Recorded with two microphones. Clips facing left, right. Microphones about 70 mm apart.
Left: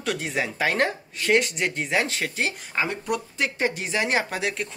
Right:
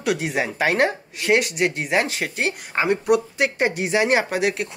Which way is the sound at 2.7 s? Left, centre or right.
Right.